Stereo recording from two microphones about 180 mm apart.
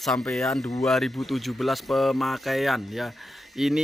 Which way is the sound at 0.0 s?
Centre (ahead or behind).